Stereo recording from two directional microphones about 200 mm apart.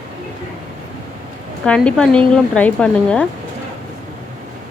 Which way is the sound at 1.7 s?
5° left (ahead or behind).